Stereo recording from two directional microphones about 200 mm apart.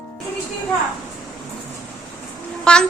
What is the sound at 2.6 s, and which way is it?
Speech, 5° left (ahead or behind).